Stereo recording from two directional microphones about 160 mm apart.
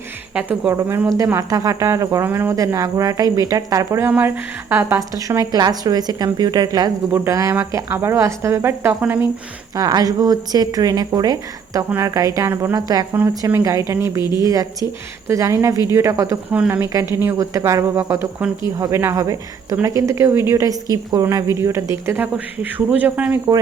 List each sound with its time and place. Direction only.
0.3 s speech: 10° right (ahead or behind)
9.7 s speech: 25° right (ahead or behind)